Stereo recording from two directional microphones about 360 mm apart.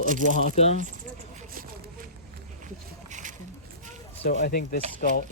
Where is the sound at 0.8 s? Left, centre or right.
Right.